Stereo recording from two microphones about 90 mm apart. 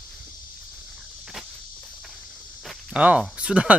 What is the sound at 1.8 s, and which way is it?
Insect, centre (ahead or behind).